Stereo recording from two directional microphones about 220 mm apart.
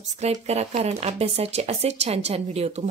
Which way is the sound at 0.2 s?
30° right (ahead or behind).